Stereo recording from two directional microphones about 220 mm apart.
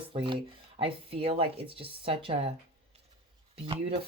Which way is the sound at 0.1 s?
25° right (ahead or behind).